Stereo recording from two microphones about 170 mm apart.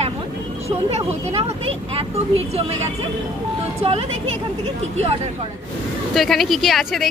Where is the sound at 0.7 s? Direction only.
35° right (ahead or behind).